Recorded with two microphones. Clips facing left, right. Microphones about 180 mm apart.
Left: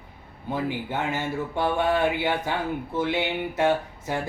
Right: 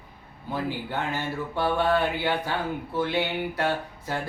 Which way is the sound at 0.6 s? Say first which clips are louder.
Left 1 dB; 20° left (ahead or behind).